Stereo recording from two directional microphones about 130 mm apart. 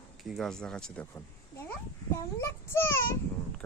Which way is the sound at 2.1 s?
20° left (ahead or behind).